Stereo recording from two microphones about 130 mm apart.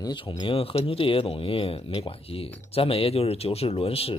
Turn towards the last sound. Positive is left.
turn(degrees=50)  # may be behind; listen again after turning